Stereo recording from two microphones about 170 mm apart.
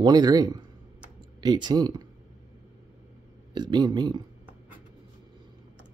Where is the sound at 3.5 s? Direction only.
25° right (ahead or behind).